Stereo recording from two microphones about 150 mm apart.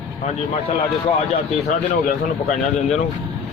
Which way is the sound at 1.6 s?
55° left (ahead or behind).